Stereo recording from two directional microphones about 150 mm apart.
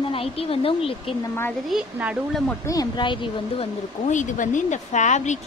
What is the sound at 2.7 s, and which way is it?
Speech, 30° left (ahead or behind).